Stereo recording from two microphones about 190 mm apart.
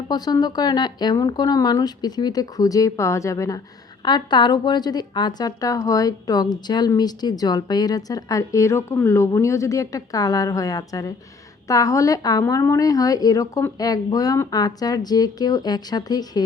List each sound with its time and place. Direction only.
0.1 s a woman's voice: 20° left (ahead or behind)